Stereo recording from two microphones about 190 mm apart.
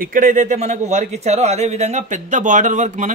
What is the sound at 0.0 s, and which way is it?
A man's voice, 45° right (ahead or behind).